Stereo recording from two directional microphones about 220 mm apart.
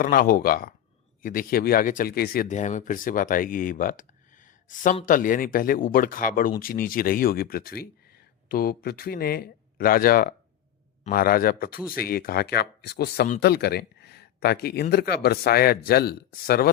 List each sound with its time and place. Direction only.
0.0 s speech: 40° left (ahead or behind)